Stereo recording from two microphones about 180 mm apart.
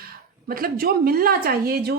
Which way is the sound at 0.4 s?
55° right (ahead or behind).